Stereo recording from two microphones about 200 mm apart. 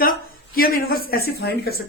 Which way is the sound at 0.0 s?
45° left (ahead or behind).